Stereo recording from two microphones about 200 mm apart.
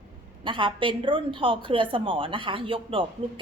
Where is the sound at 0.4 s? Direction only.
25° right (ahead or behind).